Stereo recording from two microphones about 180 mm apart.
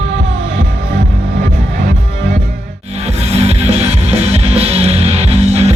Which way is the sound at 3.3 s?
35° right (ahead or behind).